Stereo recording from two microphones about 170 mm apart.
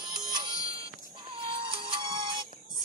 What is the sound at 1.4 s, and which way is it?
Music, 30° right (ahead or behind).